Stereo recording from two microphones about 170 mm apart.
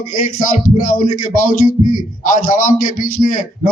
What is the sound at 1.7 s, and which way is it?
A man's voice, 55° left (ahead or behind).